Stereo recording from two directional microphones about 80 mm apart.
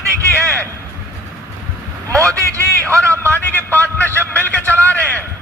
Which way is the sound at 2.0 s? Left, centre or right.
Right.